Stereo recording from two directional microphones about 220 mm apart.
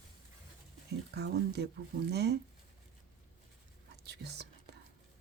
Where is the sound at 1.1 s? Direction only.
50° right (ahead or behind).